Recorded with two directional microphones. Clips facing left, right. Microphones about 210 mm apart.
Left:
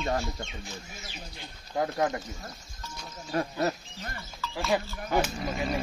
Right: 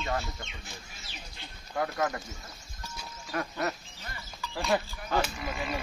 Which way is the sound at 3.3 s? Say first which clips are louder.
Left 4 dB; 30° left (ahead or behind).